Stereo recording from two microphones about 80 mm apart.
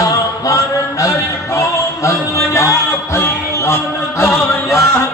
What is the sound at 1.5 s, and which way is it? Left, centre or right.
Music, left.